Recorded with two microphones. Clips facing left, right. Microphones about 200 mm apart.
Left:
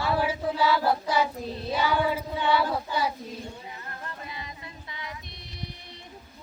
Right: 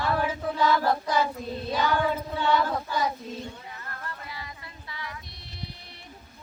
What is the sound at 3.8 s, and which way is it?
Music, 20° left (ahead or behind).